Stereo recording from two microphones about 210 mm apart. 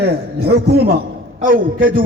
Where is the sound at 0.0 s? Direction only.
50° right (ahead or behind).